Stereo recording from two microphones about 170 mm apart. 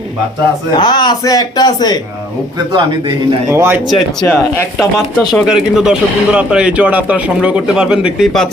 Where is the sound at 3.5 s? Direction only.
15° right (ahead or behind).